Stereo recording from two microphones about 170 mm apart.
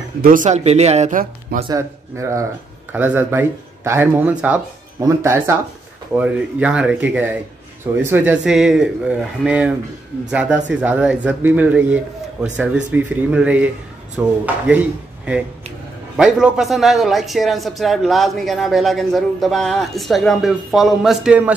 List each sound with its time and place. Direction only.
0.2 s speech: 50° right (ahead or behind)
1.7 s speech: 15° right (ahead or behind)
16.2 s speech: 5° right (ahead or behind)